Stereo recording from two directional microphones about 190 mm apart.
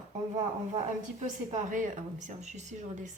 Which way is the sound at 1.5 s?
40° right (ahead or behind).